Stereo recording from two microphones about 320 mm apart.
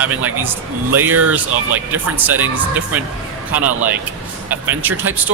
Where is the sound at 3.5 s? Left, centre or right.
Centre.